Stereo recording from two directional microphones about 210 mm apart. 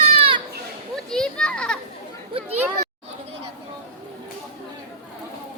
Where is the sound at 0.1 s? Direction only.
30° right (ahead or behind).